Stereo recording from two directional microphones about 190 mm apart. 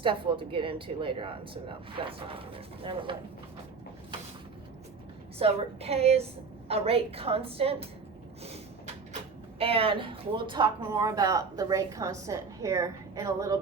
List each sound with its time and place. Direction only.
0.0 s speech: 25° right (ahead or behind)
5.4 s a woman's voice: 30° right (ahead or behind)
9.6 s a woman's voice: 30° right (ahead or behind)